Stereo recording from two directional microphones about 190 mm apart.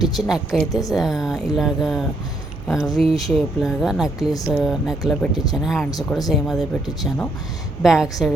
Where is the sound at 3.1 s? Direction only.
Centre (ahead or behind).